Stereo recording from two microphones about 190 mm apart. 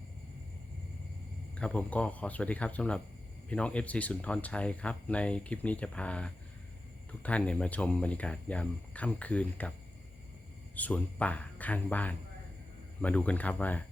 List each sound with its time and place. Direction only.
1.5 s speech: 5° left (ahead or behind)
10.8 s speech: 10° left (ahead or behind)